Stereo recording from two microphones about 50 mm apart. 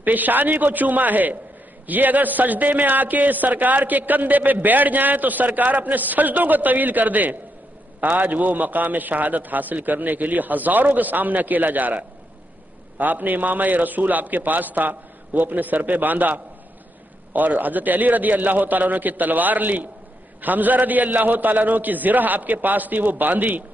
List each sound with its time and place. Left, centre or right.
0.0 s a man's voice: right